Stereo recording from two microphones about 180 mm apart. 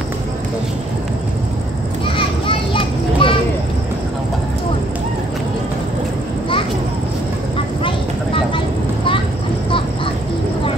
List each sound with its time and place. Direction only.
2.1 s children playing: 30° left (ahead or behind)